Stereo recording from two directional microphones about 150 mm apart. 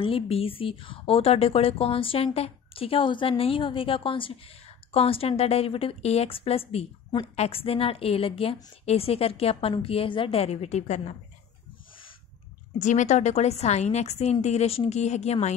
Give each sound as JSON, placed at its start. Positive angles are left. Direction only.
{"t": 0.0, "sound": "a woman's voice", "side_deg": 40}
{"t": 12.7, "sound": "a woman's voice", "side_deg": 55}